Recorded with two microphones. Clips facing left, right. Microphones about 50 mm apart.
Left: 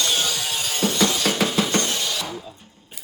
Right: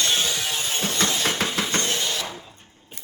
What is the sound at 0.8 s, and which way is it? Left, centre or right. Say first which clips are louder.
Music: left 4 dB; right.